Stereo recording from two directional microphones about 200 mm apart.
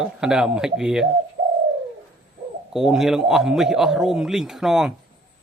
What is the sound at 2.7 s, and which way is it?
Speech, centre (ahead or behind).